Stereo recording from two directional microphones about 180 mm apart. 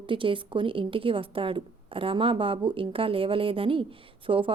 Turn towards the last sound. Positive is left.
turn(degrees=-30)  # may be behind; listen again after turning